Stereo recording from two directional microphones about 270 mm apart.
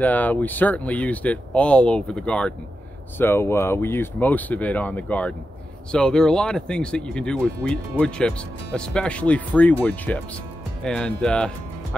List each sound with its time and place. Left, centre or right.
0.0 s speech: centre